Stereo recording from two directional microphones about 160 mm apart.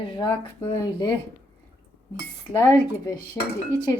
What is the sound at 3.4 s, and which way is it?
Speech, 15° left (ahead or behind).